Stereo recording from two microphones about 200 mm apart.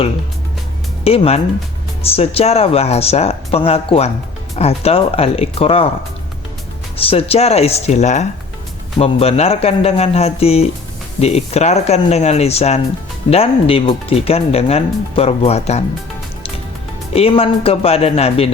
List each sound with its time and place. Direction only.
1.0 s speech: 30° left (ahead or behind)
6.9 s speech: 30° left (ahead or behind)
17.2 s speech: 30° left (ahead or behind)